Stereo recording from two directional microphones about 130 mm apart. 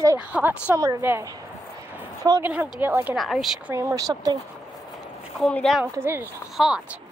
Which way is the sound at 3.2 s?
Centre (ahead or behind).